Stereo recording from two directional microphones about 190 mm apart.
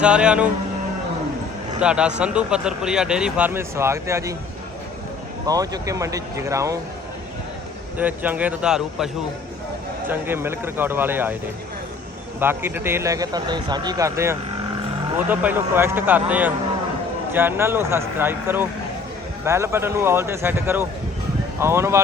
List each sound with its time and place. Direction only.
0.0 s speech: 5° right (ahead or behind)
1.8 s speech: 5° right (ahead or behind)
5.5 s speech: 20° right (ahead or behind)
7.9 s speech: 10° right (ahead or behind)
10.1 s speech: 10° right (ahead or behind)
12.4 s speech: 10° right (ahead or behind)